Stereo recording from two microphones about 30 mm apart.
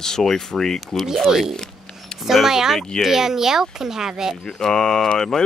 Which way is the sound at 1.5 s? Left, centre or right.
Left.